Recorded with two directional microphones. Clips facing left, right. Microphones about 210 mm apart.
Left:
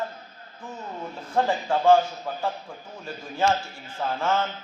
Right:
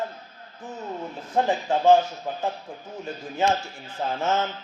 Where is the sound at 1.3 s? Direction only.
20° right (ahead or behind).